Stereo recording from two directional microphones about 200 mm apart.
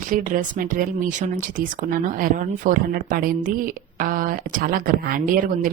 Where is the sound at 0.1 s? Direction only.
40° right (ahead or behind).